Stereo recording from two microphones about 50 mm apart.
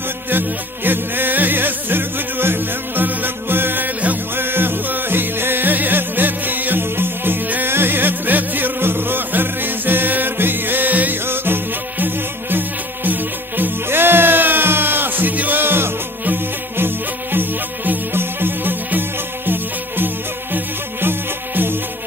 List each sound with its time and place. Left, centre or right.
0.3 s music: right
15.6 s music: right